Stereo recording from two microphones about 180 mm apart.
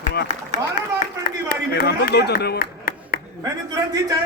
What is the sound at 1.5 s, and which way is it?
Speech, 55° left (ahead or behind).